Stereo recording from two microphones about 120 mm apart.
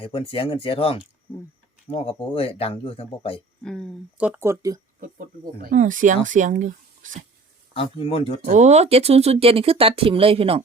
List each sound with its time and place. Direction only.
0.0 s speech: 50° left (ahead or behind)
3.6 s speech: 5° left (ahead or behind)
4.4 s speech: 25° right (ahead or behind)
5.7 s speech: 90° right
7.7 s speech: 50° left (ahead or behind)
8.4 s speech: 80° right; by 10.6 s 55° right (ahead or behind)